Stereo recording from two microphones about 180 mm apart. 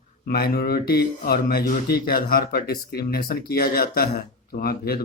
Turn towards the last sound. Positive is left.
turn(degrees=60)  # may be behind; listen again after turning